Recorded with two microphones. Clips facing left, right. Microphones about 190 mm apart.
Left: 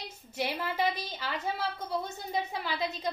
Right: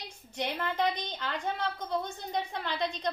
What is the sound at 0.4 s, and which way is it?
A woman's voice, 5° left (ahead or behind).